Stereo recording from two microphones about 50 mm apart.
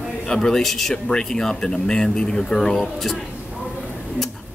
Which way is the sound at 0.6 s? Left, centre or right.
Centre.